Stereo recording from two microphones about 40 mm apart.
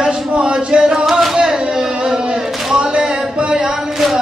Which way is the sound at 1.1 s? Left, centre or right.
Centre.